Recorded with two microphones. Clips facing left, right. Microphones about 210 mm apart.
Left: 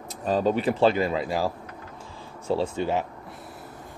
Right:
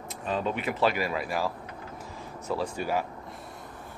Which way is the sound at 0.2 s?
35° left (ahead or behind).